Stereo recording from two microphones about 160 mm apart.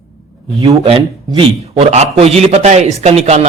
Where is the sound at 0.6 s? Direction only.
40° right (ahead or behind).